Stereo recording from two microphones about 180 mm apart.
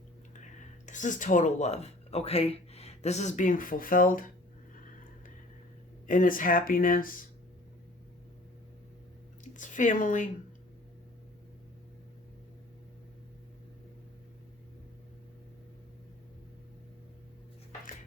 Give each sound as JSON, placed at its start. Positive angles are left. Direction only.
{"t": 0.9, "sound": "speech", "side_deg": 45}
{"t": 6.1, "sound": "speech", "side_deg": 50}
{"t": 9.4, "sound": "speech", "side_deg": 45}